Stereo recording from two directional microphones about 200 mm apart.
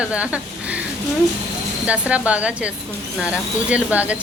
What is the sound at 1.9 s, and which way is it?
Speech, 5° right (ahead or behind).